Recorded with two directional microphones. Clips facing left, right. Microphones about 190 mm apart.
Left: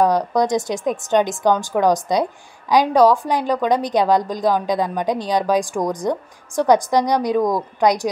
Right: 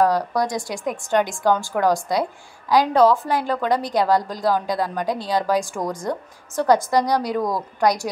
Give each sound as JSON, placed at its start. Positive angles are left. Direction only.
{"t": 0.0, "sound": "a woman's voice", "side_deg": 20}